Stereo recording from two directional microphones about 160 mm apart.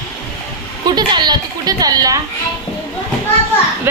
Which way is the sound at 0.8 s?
25° right (ahead or behind).